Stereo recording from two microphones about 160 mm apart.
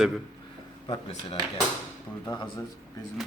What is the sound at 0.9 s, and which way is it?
Speech, 25° left (ahead or behind).